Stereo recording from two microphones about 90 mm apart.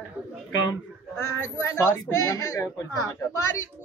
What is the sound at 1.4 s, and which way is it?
A child's voice, 35° left (ahead or behind).